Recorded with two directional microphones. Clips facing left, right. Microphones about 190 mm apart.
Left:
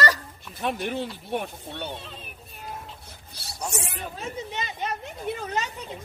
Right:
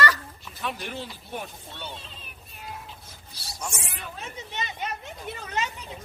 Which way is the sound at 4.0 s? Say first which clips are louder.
Left 5 dB; 40° left (ahead or behind).